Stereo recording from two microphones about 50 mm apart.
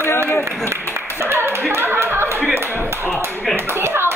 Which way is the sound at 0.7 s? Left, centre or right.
Right.